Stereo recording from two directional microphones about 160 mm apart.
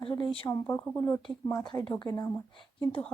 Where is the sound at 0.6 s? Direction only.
15° left (ahead or behind).